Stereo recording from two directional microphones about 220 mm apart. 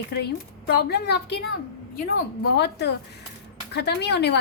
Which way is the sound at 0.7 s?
45° left (ahead or behind).